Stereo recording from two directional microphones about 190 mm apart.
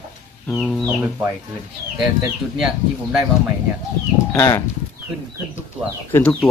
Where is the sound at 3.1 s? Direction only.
5° right (ahead or behind).